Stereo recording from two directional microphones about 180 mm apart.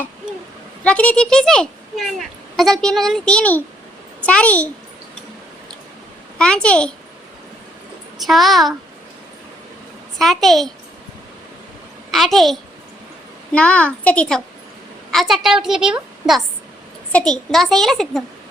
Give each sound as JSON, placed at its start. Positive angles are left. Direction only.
{"t": 0.9, "sound": "a child's voice", "side_deg": 5}
{"t": 6.4, "sound": "a child's voice", "side_deg": 5}
{"t": 8.2, "sound": "a child's voice", "side_deg": 0}
{"t": 10.2, "sound": "a child's voice", "side_deg": 0}
{"t": 12.1, "sound": "a child's voice", "side_deg": 0}